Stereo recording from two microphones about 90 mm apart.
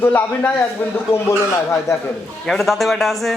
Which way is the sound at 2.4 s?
5° left (ahead or behind).